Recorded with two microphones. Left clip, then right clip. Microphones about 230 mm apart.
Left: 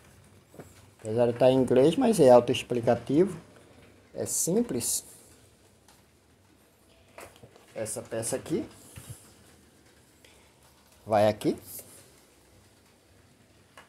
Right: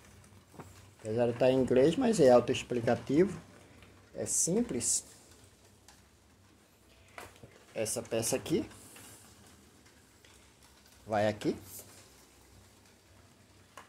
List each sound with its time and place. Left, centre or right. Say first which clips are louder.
1.0 s speech: left 5 dB; centre
7.7 s speech: even; centre
11.1 s speech: left 7 dB; left